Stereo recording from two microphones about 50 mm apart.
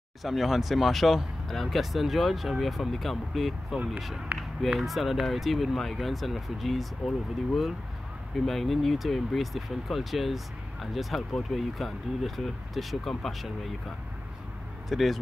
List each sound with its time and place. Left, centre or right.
0.2 s speech: centre
3.7 s speech: right
4.3 s run: right
4.7 s speech: centre
14.9 s speech: centre